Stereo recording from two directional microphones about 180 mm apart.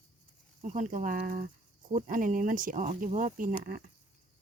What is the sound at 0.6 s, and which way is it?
Speech, 45° right (ahead or behind).